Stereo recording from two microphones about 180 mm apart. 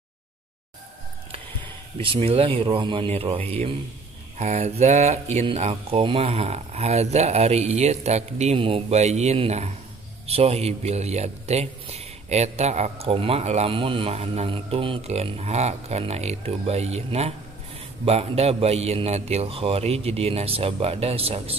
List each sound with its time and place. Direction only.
1.3 s speech: 30° right (ahead or behind)